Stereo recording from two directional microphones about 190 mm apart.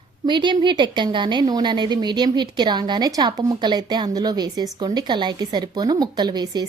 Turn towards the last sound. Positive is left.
turn(degrees=-20)  # may be behind; listen again after turning